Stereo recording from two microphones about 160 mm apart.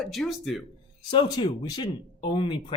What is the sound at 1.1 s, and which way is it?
Speech, 30° left (ahead or behind).